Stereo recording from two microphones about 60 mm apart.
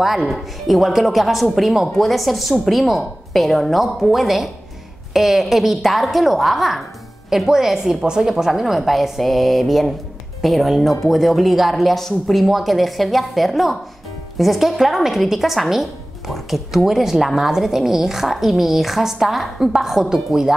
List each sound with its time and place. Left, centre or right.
0.3 s speech: centre